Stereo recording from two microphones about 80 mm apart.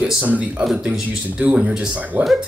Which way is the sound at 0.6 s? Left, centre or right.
Centre.